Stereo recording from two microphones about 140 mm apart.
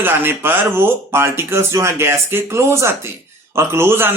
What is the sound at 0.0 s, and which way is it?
Speech, 15° right (ahead or behind).